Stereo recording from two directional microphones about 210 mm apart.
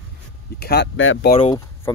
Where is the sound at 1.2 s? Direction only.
30° left (ahead or behind).